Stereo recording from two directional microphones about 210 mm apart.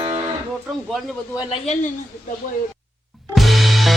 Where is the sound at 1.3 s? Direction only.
25° left (ahead or behind).